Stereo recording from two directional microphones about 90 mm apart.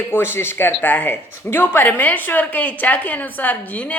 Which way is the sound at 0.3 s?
25° left (ahead or behind).